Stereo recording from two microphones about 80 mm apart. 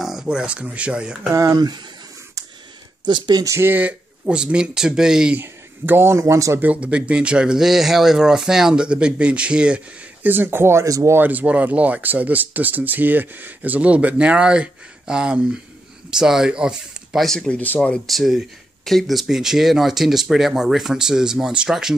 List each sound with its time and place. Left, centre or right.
0.0 s speech: centre
1.3 s speech: right
3.1 s speech: right
3.4 s speech: right
3.7 s speech: centre
5.4 s speech: right
6.6 s speech: centre
10.2 s speech: right
10.9 s speech: right
11.1 s speech: centre
17.3 s speech: centre
18.0 s speech: centre